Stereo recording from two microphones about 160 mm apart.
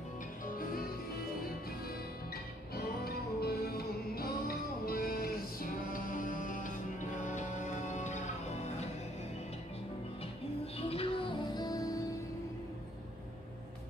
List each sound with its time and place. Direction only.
2.3 s music: 75° left (ahead or behind); by 8.8 s 45° left (ahead or behind)
10.8 s music: 35° left (ahead or behind)